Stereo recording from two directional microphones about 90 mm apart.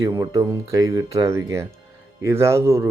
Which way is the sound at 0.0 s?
50° right (ahead or behind).